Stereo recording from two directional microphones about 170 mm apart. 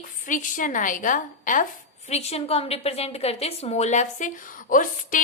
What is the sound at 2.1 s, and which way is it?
A woman's voice, 40° left (ahead or behind).